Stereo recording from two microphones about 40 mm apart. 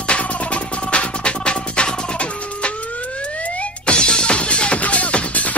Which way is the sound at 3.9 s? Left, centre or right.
Left.